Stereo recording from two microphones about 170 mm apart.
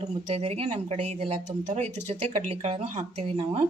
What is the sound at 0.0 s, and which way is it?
Speech, 40° right (ahead or behind).